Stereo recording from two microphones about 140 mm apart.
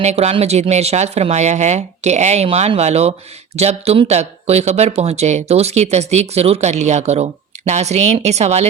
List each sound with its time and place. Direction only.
0.0 s speech: 50° right (ahead or behind)